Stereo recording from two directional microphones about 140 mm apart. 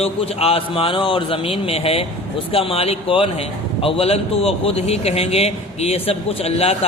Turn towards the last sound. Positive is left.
turn(degrees=45)  # may be behind; listen again after turning